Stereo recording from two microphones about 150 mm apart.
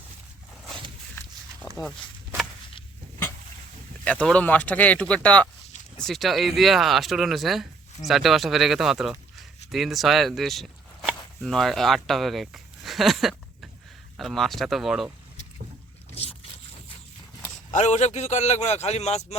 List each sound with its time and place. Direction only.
1.6 s a sound: 25° left (ahead or behind)
4.0 s speech: 10° left (ahead or behind)
17.7 s a man's voice: 55° left (ahead or behind)